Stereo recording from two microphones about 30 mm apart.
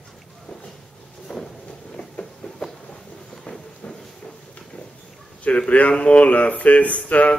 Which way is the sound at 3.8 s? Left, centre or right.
Left.